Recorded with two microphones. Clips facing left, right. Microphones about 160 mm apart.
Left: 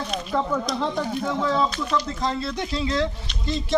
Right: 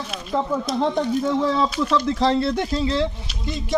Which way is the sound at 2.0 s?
80° right.